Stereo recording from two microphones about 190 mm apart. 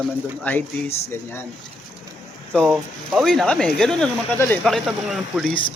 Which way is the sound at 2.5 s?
5° left (ahead or behind).